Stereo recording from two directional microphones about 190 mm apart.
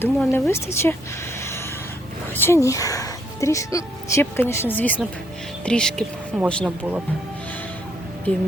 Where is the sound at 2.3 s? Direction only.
15° left (ahead or behind).